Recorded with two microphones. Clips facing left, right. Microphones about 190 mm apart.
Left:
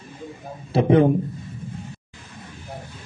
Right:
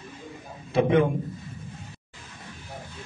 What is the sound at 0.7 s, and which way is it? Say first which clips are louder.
Speech: left 4 dB; 35° left (ahead or behind).